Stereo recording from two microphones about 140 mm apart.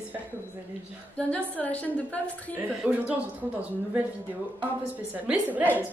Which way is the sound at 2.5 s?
10° right (ahead or behind).